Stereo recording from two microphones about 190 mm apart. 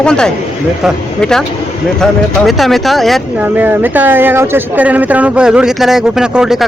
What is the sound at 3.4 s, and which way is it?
Speech, 10° right (ahead or behind).